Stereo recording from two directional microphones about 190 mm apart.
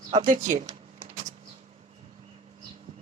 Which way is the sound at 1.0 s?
35° right (ahead or behind).